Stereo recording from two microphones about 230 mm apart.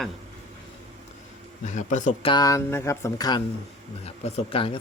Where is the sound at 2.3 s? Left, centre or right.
Centre.